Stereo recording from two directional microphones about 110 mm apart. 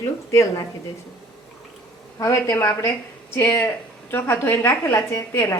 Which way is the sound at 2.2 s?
25° left (ahead or behind).